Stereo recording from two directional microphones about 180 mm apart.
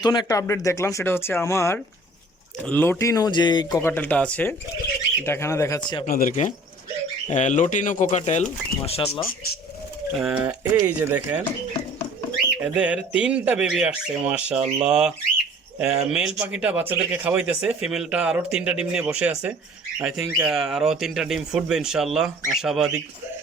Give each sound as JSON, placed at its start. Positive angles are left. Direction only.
{"t": 0.0, "sound": "speech", "side_deg": 25}
{"t": 6.1, "sound": "speech", "side_deg": 45}
{"t": 10.2, "sound": "speech", "side_deg": -5}
{"t": 12.6, "sound": "speech", "side_deg": -5}